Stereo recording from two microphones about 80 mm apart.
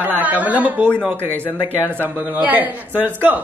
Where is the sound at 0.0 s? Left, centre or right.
Right.